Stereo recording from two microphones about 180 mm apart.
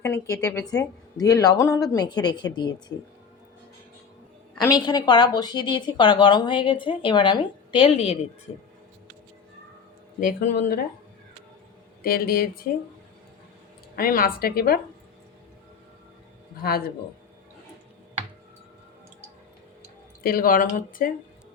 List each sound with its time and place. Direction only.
0.3 s a woman's voice: 15° left (ahead or behind)
4.5 s a woman's voice: 20° left (ahead or behind)
10.2 s speech: 45° left (ahead or behind)
10.5 s a woman's voice: 60° left (ahead or behind)
12.0 s a woman's voice: 55° left (ahead or behind)
13.9 s a woman's voice: 55° left (ahead or behind)
20.2 s speech: 50° left (ahead or behind)